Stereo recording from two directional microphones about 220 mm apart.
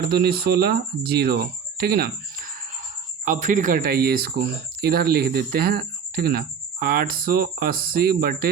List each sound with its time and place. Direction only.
0.1 s speech: 45° right (ahead or behind)
3.2 s speech: 35° right (ahead or behind)